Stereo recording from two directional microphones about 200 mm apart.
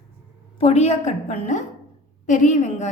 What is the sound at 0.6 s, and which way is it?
A woman's voice, 30° left (ahead or behind).